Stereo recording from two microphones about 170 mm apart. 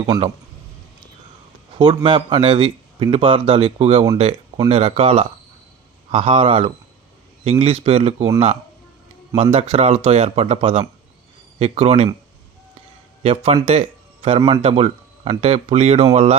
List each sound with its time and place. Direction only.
0.0 s speech: 35° right (ahead or behind)
2.0 s speech: 30° right (ahead or behind)
9.3 s speech: 35° right (ahead or behind)
13.2 s speech: 35° right (ahead or behind)